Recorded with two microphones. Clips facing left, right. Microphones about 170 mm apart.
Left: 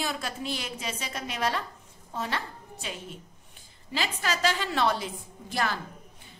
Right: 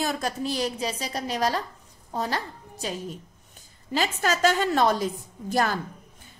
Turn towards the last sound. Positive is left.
turn(degrees=-45)  # may be behind; listen again after turning